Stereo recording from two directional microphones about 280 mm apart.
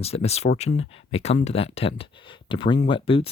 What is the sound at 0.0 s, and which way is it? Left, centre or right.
Speech, left.